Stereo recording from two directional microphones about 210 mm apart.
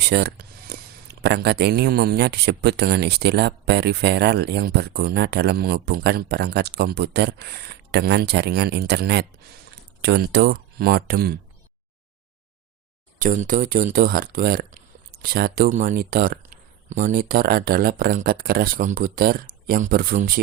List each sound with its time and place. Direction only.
0.0 s speech: 50° right (ahead or behind)
13.1 s speech: 40° right (ahead or behind)